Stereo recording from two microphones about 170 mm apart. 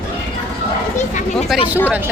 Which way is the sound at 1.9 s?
10° right (ahead or behind).